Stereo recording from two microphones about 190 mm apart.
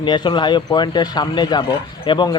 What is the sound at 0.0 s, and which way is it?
Speech, 25° left (ahead or behind).